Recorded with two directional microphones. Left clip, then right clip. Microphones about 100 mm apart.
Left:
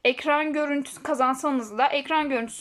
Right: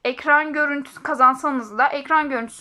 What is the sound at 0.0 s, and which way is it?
A woman's voice, 25° left (ahead or behind).